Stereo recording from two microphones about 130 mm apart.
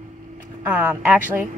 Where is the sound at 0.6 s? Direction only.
10° right (ahead or behind).